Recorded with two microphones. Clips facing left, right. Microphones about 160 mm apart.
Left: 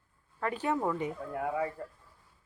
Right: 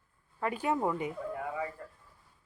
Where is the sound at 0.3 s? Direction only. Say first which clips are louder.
Even; 10° right (ahead or behind).